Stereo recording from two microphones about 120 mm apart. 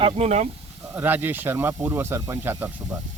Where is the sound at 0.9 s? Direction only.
15° right (ahead or behind).